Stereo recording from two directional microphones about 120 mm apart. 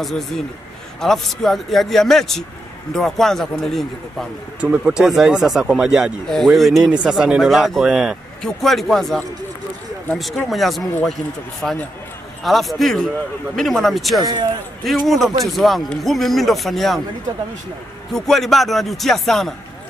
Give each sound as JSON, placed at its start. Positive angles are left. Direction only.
{"t": 1.0, "sound": "speech", "side_deg": 5}
{"t": 4.6, "sound": "speech", "side_deg": -10}
{"t": 10.5, "sound": "speech", "side_deg": 0}
{"t": 14.2, "sound": "a man's voice", "side_deg": -40}
{"t": 14.9, "sound": "speech", "side_deg": 0}
{"t": 18.1, "sound": "speech", "side_deg": 5}